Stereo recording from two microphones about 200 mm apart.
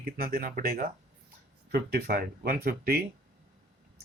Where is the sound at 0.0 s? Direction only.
50° right (ahead or behind).